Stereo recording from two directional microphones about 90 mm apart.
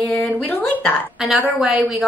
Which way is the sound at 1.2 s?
5° right (ahead or behind).